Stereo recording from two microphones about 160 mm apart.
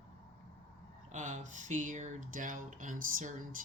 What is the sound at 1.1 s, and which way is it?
Speech, 50° right (ahead or behind).